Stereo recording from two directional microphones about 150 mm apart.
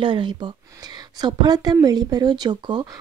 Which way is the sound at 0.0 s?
30° right (ahead or behind).